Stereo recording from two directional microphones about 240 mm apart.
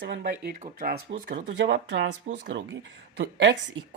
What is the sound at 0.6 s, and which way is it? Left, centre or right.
Speech, right.